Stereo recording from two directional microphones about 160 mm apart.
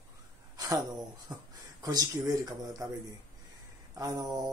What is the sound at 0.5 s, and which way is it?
Speech, 25° right (ahead or behind).